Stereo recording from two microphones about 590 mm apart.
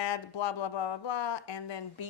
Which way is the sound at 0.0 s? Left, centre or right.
Left.